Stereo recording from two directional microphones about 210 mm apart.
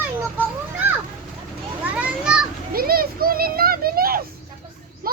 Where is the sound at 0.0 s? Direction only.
10° right (ahead or behind).